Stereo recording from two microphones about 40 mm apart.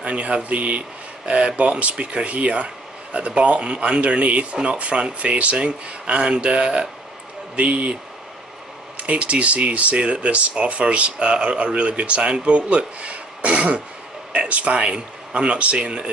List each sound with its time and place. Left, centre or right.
0.0 s speech: right